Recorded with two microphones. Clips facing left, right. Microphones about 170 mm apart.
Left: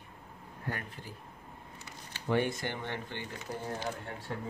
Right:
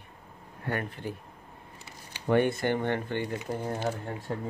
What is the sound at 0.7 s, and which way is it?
Speech, 65° right (ahead or behind).